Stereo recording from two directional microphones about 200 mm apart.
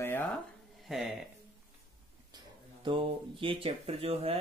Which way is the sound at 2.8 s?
25° right (ahead or behind).